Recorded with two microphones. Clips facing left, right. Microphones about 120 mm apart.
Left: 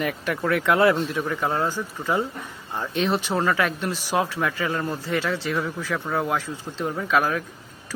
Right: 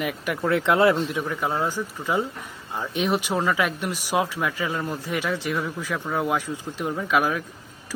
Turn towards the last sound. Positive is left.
turn(degrees=-10)  # may be behind; listen again after turning